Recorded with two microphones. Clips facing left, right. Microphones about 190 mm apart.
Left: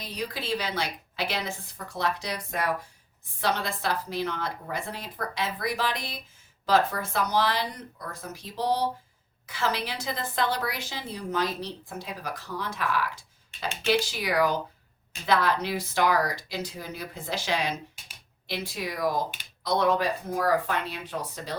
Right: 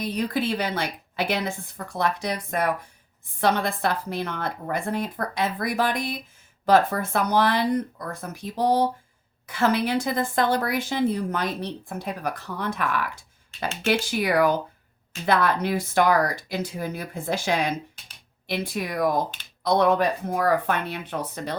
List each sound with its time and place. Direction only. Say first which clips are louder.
0.0 s a woman's voice: right 9 dB; 55° right (ahead or behind)